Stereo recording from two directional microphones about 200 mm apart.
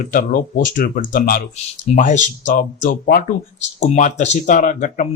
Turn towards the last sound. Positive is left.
turn(degrees=40)  # may be behind; listen again after turning